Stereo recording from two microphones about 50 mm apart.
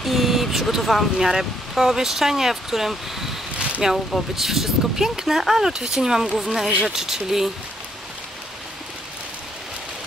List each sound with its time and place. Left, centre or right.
0.0 s speech: centre
3.5 s a sound: right
4.4 s speech: centre